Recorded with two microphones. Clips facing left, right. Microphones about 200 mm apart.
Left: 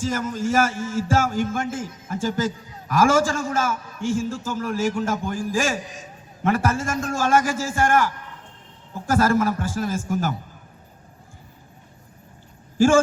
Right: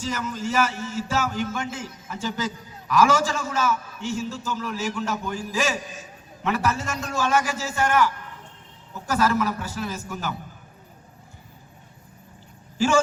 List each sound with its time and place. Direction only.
0.0 s a man's voice: 50° left (ahead or behind)
12.7 s speech: 50° left (ahead or behind)